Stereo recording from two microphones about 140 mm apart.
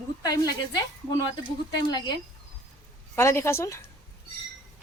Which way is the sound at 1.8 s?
30° left (ahead or behind).